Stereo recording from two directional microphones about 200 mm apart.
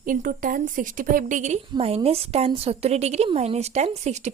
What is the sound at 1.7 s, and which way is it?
A woman's voice, 25° right (ahead or behind).